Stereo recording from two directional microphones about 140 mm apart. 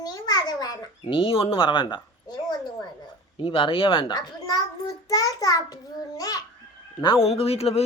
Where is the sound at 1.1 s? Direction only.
40° left (ahead or behind).